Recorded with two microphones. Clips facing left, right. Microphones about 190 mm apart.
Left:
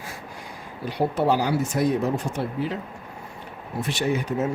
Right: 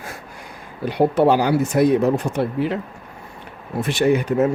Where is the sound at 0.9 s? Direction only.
60° right (ahead or behind).